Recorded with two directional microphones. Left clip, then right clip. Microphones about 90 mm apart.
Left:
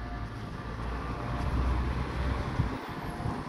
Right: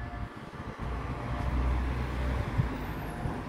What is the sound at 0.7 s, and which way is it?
Vehicle, 5° left (ahead or behind).